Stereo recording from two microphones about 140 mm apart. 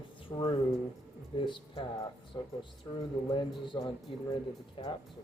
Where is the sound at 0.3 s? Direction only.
30° left (ahead or behind).